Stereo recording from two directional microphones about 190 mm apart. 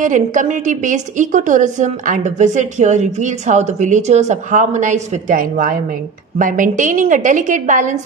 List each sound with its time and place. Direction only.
0.0 s a woman's voice: 40° right (ahead or behind)